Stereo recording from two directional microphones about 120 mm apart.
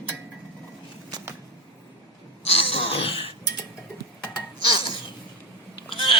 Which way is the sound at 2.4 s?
55° left (ahead or behind).